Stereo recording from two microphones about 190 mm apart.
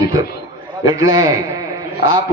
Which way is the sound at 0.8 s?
20° right (ahead or behind).